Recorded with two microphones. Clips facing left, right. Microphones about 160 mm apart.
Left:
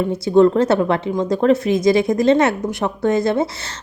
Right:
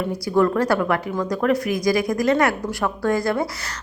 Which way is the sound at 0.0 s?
25° left (ahead or behind).